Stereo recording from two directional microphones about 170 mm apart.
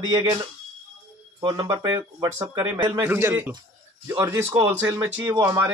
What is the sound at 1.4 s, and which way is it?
Speech, 20° right (ahead or behind).